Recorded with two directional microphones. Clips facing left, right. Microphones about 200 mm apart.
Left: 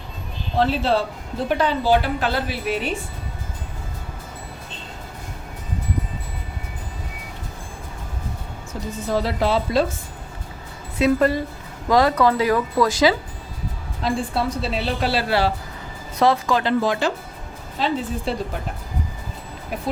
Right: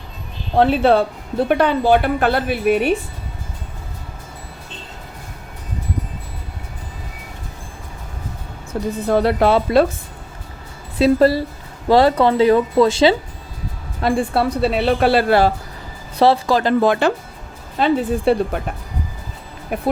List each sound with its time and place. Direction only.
0.5 s a woman's voice: 60° right (ahead or behind)
9.0 s a woman's voice: 60° right (ahead or behind)
10.9 s speech: 35° right (ahead or behind)
14.0 s a woman's voice: 60° right (ahead or behind)
16.1 s speech: 30° right (ahead or behind)
16.8 s a woman's voice: 55° right (ahead or behind)
19.7 s a woman's voice: 55° right (ahead or behind)